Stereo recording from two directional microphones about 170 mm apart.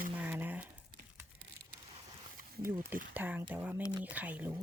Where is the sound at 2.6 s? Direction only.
15° right (ahead or behind).